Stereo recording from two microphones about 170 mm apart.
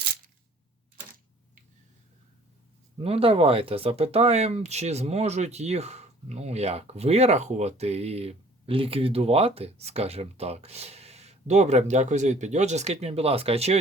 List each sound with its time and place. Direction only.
3.0 s speech: 35° right (ahead or behind)